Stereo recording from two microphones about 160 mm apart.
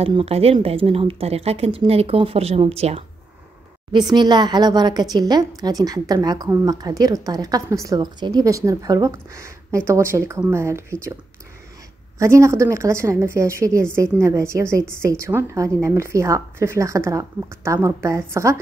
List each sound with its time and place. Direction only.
0.0 s speech: 40° right (ahead or behind)
3.9 s a woman's voice: 25° right (ahead or behind)
12.2 s a woman's voice: 20° right (ahead or behind)